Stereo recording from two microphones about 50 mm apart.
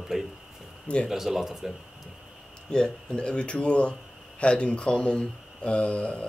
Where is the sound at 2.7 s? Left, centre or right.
Centre.